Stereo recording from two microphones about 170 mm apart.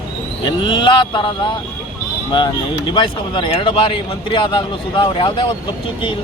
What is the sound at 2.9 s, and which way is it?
A man's voice, 30° left (ahead or behind).